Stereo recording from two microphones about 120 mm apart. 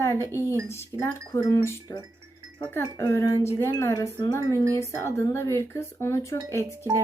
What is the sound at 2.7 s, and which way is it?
Speech, 25° left (ahead or behind).